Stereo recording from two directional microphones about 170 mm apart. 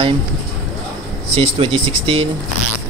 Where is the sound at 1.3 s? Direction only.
35° right (ahead or behind).